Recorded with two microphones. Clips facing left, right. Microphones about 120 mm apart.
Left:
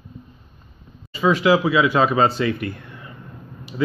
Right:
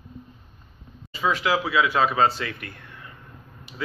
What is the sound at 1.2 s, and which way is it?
A man's voice, 5° left (ahead or behind).